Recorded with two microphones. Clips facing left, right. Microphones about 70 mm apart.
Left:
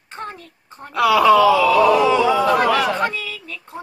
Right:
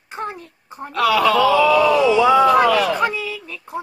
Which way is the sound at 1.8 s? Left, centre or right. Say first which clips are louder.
Left 1 dB; left.